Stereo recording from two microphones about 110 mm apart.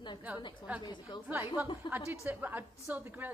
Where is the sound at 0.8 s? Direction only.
45° left (ahead or behind).